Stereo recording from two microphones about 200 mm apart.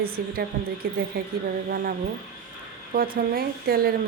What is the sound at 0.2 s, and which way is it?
Speech, 50° right (ahead or behind).